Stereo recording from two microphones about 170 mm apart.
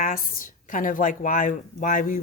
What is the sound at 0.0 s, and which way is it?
Speech, 55° left (ahead or behind).